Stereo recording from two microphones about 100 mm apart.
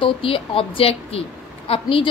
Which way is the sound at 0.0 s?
65° left (ahead or behind).